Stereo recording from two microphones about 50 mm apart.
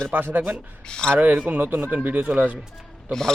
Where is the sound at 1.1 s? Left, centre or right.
Right.